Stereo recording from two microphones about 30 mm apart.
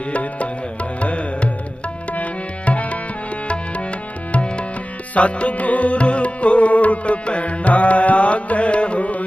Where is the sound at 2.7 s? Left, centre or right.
Left.